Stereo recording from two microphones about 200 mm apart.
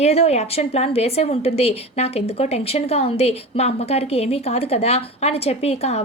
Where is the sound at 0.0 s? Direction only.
30° left (ahead or behind).